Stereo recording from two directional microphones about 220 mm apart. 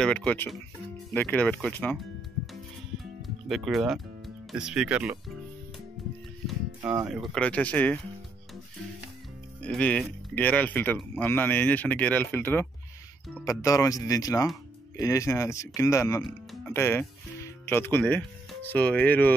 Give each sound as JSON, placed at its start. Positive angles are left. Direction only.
{"t": 0.0, "sound": "speech", "side_deg": 5}
{"t": 3.0, "sound": "music", "side_deg": 0}
{"t": 4.5, "sound": "speech", "side_deg": -5}
{"t": 6.8, "sound": "speech", "side_deg": -15}
{"t": 7.1, "sound": "speech", "side_deg": 0}
{"t": 9.6, "sound": "speech", "side_deg": 5}